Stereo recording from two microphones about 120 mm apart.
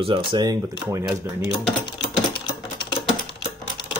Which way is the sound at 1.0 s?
10° right (ahead or behind).